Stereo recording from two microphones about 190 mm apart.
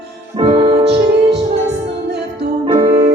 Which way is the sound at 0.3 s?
30° right (ahead or behind).